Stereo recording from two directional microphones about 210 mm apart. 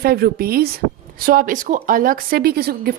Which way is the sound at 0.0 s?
45° right (ahead or behind).